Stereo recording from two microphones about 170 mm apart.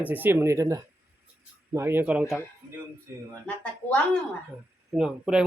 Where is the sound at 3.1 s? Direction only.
20° right (ahead or behind).